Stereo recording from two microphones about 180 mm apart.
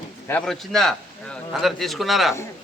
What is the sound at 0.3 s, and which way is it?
A man's voice, 5° left (ahead or behind).